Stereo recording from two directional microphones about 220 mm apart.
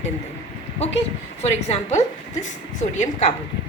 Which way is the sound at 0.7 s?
30° left (ahead or behind).